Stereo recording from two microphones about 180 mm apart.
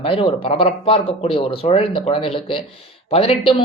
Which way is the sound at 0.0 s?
30° left (ahead or behind).